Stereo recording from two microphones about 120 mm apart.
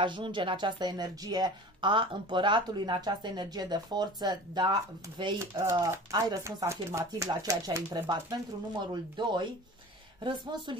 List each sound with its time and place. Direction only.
0.0 s speech: 40° right (ahead or behind)
5.4 s speech: 25° right (ahead or behind)